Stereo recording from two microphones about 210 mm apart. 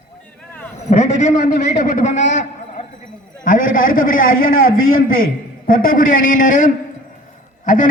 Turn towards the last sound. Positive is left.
turn(degrees=40)  # may be behind; listen again after turning